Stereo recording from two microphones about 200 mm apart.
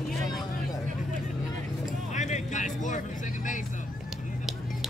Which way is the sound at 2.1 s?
35° left (ahead or behind).